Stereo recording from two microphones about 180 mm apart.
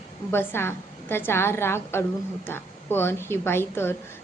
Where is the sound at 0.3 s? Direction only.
10° left (ahead or behind).